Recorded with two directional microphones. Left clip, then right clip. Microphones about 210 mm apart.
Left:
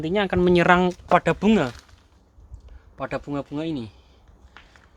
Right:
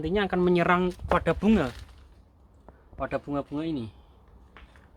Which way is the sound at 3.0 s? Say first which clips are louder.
Left 2 dB; 45° left (ahead or behind).